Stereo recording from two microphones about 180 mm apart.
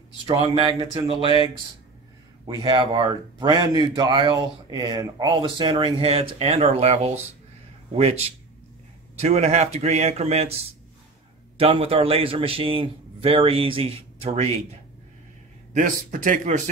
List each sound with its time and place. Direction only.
0.3 s speech: 25° right (ahead or behind)
2.4 s a man's voice: 25° right (ahead or behind)
11.5 s a man's voice: 30° right (ahead or behind)
15.7 s speech: 45° right (ahead or behind)